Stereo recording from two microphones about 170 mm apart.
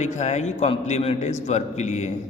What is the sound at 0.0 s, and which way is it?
A man's voice, 45° left (ahead or behind).